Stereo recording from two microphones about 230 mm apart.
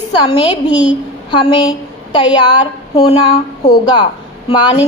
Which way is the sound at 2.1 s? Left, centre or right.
Centre.